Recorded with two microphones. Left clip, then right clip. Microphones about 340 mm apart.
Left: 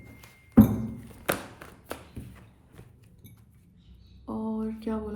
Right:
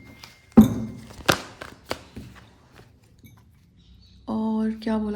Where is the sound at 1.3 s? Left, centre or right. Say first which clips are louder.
Right 6 dB; right.